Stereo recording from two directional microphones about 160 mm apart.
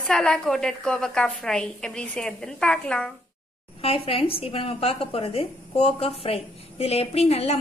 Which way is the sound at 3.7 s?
40° left (ahead or behind).